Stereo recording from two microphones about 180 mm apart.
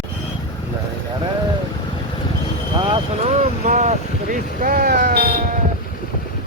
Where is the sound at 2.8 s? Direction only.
30° right (ahead or behind); by 5.3 s 60° right (ahead or behind).